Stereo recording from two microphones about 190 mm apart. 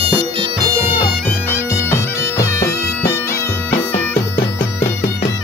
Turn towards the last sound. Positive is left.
turn(degrees=10)  # may be behind; listen again after turning